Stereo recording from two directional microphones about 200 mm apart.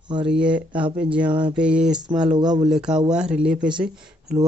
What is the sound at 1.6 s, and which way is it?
Speech, 5° right (ahead or behind).